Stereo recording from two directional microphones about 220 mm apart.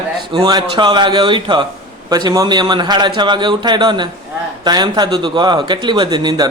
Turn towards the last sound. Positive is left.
turn(degrees=-20)  # may be behind; listen again after turning